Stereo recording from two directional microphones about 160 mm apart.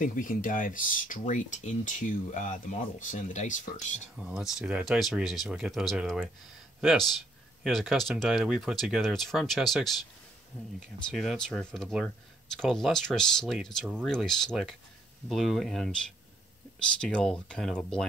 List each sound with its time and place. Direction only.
0.0 s speech: 55° left (ahead or behind)
4.2 s speech: 5° right (ahead or behind)
11.1 s speech: centre (ahead or behind)
17.0 s speech: 5° left (ahead or behind)